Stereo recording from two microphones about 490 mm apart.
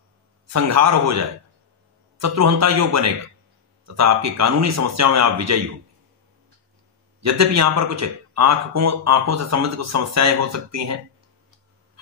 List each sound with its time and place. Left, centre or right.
0.5 s a man's voice: right
7.2 s a man's voice: right